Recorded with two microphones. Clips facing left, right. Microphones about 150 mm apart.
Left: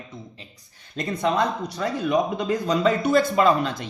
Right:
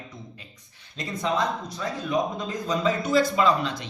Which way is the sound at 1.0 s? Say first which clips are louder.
Left 4 dB; 65° left (ahead or behind).